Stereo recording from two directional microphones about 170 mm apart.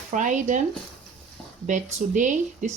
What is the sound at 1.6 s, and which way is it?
Speech, 45° right (ahead or behind).